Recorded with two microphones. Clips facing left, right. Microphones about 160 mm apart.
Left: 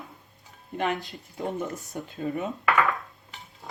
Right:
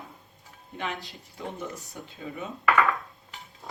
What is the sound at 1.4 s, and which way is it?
Speech, 50° left (ahead or behind).